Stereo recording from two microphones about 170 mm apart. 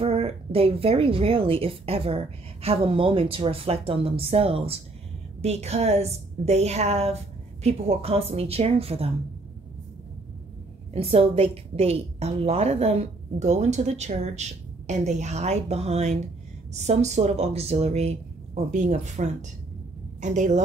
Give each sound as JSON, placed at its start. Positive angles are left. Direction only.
{"t": 0.0, "sound": "a woman's voice", "side_deg": -35}
{"t": 10.9, "sound": "a woman's voice", "side_deg": -35}